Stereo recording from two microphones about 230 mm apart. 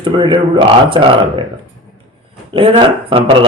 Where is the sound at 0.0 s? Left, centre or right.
Right.